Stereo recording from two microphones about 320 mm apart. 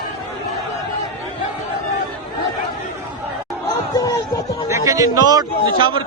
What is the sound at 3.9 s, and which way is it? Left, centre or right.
Speech, centre.